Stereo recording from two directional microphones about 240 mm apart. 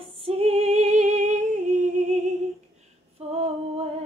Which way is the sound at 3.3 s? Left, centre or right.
Right.